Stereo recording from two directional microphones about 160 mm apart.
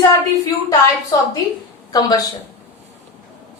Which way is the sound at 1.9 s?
25° left (ahead or behind).